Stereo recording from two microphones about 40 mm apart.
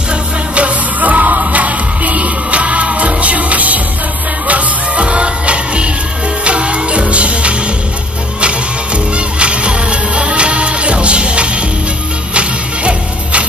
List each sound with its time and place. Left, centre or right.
0.6 s music: right
9.1 s music: right